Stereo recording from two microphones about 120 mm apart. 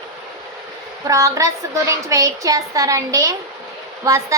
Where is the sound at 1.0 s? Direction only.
30° right (ahead or behind).